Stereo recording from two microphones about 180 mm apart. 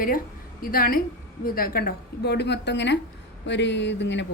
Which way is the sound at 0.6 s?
55° left (ahead or behind).